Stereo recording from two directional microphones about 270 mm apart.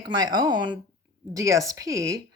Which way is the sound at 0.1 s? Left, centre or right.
Centre.